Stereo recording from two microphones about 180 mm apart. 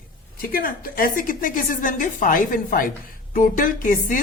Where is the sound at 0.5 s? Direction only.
55° left (ahead or behind).